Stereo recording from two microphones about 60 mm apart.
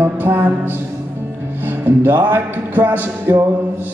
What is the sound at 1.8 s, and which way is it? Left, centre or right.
Speech, right.